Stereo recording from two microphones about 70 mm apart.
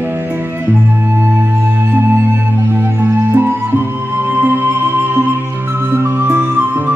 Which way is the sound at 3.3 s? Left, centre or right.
Right.